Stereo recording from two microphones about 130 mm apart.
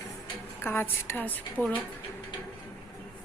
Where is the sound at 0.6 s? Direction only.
15° left (ahead or behind).